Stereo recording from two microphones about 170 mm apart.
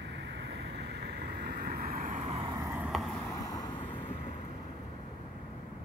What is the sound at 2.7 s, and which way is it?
Vehicle, 5° right (ahead or behind).